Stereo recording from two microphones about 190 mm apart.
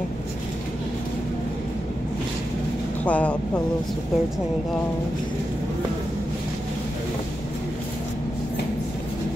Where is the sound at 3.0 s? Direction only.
5° left (ahead or behind).